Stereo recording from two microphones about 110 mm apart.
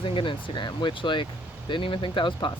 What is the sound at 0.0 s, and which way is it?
Speech, 50° left (ahead or behind).